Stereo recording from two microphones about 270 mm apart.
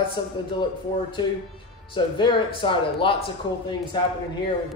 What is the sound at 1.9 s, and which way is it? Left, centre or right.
A man's voice, centre.